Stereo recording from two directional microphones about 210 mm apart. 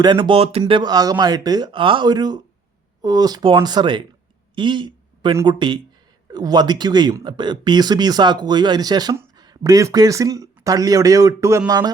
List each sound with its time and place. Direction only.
0.0 s speech: 20° right (ahead or behind)